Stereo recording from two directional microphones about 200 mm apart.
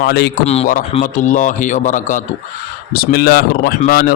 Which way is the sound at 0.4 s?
30° left (ahead or behind).